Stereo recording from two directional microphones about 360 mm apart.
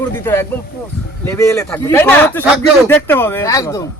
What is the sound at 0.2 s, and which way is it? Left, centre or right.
A man's voice, centre.